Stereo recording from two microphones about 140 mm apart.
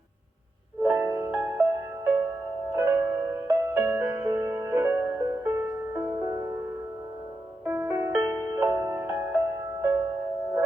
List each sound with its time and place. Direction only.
0.8 s music: 15° right (ahead or behind)
7.6 s music: 15° right (ahead or behind)